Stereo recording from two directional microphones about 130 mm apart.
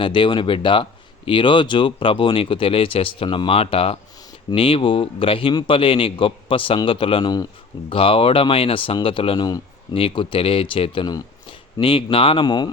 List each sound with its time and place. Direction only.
0.0 s speech: 40° left (ahead or behind)
7.9 s speech: 45° left (ahead or behind)
11.0 s a sound: 35° left (ahead or behind)
12.1 s speech: 45° left (ahead or behind)